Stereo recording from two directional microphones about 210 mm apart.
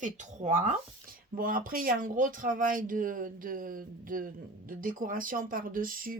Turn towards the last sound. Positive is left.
turn(degrees=-40)  # may be behind; listen again after turning